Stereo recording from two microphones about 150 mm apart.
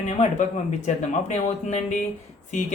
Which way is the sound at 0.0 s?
50° left (ahead or behind).